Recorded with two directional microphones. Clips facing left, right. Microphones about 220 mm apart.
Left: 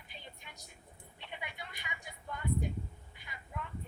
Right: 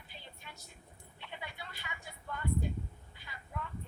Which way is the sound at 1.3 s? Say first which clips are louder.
Even; 20° left (ahead or behind).